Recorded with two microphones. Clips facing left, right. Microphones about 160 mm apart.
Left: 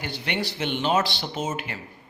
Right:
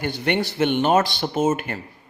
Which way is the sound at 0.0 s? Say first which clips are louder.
Right 7 dB; 50° right (ahead or behind).